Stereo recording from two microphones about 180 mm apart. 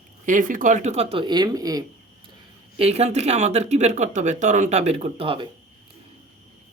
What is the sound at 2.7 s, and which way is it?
Speech, 35° right (ahead or behind).